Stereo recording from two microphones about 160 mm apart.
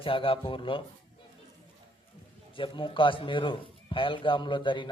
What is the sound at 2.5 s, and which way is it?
A man's voice, 30° left (ahead or behind).